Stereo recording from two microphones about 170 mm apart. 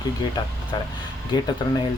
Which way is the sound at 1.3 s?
25° left (ahead or behind).